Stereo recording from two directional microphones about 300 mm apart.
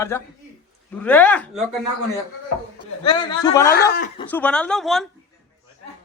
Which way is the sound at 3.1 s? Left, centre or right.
Centre.